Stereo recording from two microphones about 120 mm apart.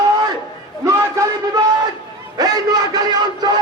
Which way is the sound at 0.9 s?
25° right (ahead or behind).